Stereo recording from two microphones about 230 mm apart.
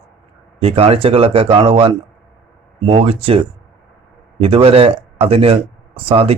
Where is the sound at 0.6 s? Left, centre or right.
Right.